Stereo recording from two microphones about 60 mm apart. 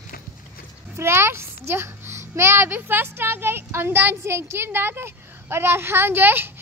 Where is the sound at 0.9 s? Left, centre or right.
Right.